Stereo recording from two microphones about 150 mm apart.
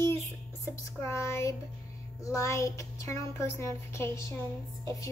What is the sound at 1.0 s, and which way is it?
Speech, 20° left (ahead or behind).